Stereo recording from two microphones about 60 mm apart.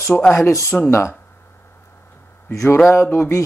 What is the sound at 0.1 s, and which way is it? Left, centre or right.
Speech, centre.